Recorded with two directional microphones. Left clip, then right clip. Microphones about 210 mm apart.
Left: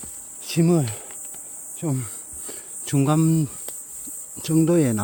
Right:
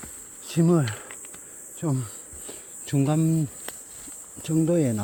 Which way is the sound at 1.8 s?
20° left (ahead or behind).